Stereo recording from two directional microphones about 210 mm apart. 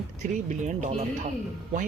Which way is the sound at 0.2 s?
40° right (ahead or behind).